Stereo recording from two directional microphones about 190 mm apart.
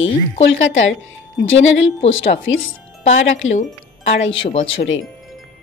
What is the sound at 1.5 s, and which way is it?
Speech, 80° left.